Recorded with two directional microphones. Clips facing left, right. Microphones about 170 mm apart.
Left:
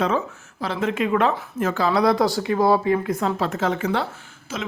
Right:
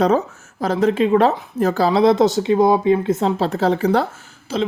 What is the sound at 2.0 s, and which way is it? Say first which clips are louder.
Speech: right 5 dB; 25° right (ahead or behind).